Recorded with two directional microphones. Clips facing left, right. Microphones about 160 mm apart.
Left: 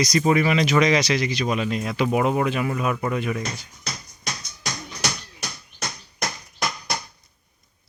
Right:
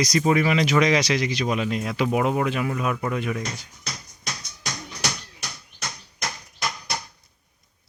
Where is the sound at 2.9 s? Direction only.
15° left (ahead or behind).